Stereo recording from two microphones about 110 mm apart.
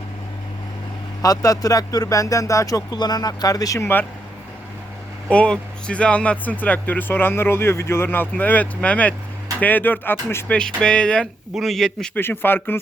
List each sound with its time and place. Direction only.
1.2 s speech: 30° left (ahead or behind)
5.3 s speech: 10° left (ahead or behind)
10.6 s speech: 10° left (ahead or behind)
12.1 s speech: 20° left (ahead or behind)